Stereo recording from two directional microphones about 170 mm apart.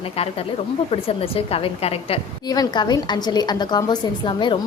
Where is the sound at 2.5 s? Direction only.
25° left (ahead or behind).